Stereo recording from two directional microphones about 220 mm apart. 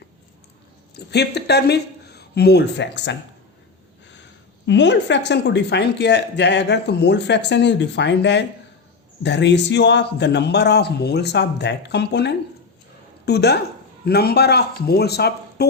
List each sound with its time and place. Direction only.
0.9 s speech: 50° left (ahead or behind)
4.6 s speech: 55° left (ahead or behind)